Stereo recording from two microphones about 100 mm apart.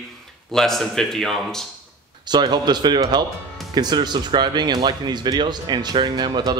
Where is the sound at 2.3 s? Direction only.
45° right (ahead or behind).